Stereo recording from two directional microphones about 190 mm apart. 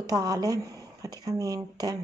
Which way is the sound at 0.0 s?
20° right (ahead or behind).